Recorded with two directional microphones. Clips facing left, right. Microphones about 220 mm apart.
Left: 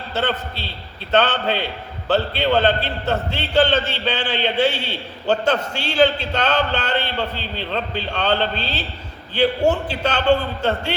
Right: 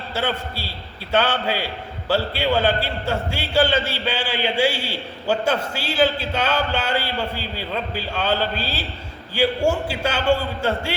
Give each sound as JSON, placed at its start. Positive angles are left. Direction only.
{"t": 0.1, "sound": "a man's voice", "side_deg": -10}